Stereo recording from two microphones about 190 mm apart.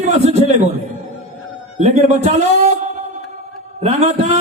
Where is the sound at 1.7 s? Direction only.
35° right (ahead or behind).